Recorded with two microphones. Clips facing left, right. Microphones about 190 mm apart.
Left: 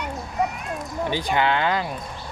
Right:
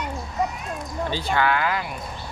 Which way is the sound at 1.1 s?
15° left (ahead or behind).